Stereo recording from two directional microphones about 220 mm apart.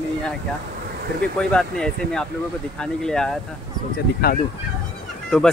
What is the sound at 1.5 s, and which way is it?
Speech, 5° left (ahead or behind).